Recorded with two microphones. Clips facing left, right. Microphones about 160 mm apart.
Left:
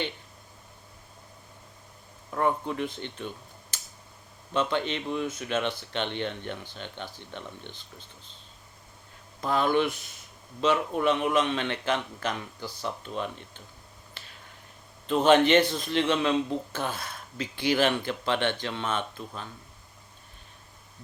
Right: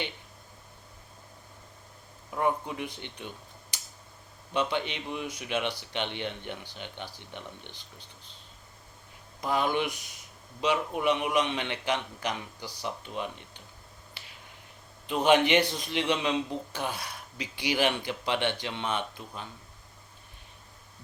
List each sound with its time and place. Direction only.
2.3 s a man's voice: 15° right (ahead or behind)
9.4 s a man's voice: 15° right (ahead or behind)
15.0 s a man's voice: 15° right (ahead or behind)